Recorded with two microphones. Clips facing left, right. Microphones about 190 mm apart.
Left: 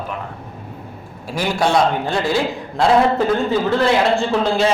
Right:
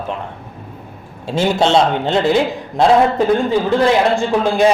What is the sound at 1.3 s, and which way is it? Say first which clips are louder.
A man's voice: right 4 dB; 25° right (ahead or behind).